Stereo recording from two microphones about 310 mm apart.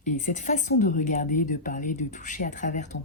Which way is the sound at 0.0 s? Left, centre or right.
Left.